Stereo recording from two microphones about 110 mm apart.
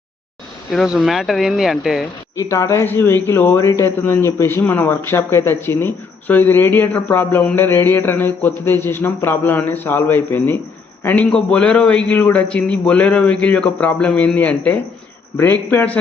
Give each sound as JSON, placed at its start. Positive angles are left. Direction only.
{"t": 0.7, "sound": "speech", "side_deg": 0}
{"t": 2.4, "sound": "a man's voice", "side_deg": 25}